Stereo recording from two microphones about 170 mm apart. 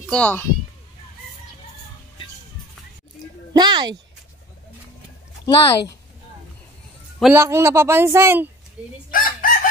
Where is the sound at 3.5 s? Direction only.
25° right (ahead or behind).